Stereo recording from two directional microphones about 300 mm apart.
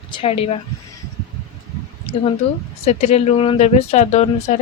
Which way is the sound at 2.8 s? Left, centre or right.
Left.